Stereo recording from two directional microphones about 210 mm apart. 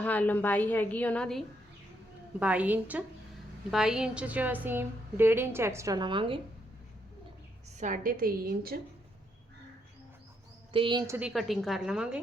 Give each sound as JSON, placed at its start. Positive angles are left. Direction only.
{"t": 0.0, "sound": "a woman's voice", "side_deg": 10}
{"t": 7.8, "sound": "a woman's voice", "side_deg": -40}
{"t": 10.7, "sound": "a woman's voice", "side_deg": -25}